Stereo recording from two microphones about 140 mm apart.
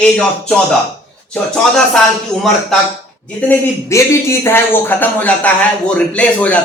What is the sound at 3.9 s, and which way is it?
Speech, 20° left (ahead or behind).